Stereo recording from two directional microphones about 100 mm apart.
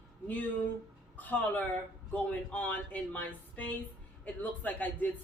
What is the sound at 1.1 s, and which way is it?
A woman's voice, 15° left (ahead or behind).